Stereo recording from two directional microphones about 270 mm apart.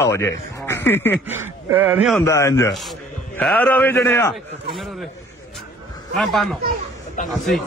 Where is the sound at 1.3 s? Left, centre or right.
Centre.